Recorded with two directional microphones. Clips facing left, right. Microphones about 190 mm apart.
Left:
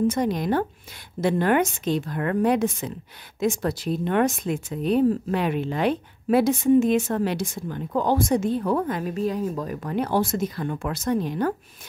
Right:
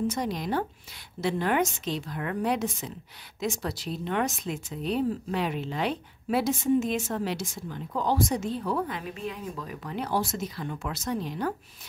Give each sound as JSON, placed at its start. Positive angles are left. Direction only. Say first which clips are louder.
{"t": 0.1, "sound": "speech", "louder": "left 6 dB", "side_deg": 55}